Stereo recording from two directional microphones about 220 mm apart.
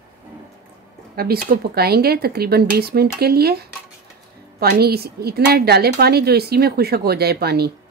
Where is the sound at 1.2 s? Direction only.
40° right (ahead or behind).